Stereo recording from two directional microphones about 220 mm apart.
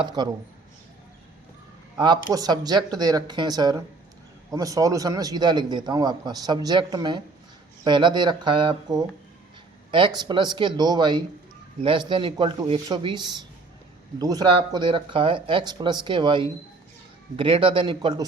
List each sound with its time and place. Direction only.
0.0 s speech: 20° right (ahead or behind)
2.0 s a man's voice: 20° right (ahead or behind)